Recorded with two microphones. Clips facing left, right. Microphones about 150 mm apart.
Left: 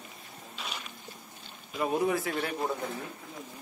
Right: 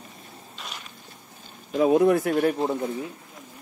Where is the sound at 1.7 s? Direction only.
90° right; by 2.6 s 55° right (ahead or behind).